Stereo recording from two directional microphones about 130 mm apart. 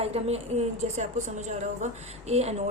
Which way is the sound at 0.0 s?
50° right (ahead or behind).